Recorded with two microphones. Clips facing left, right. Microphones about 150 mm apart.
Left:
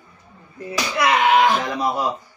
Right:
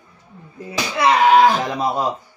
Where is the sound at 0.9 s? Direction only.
35° right (ahead or behind).